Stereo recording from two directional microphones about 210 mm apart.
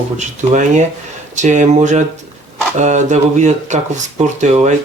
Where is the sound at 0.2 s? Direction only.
35° right (ahead or behind).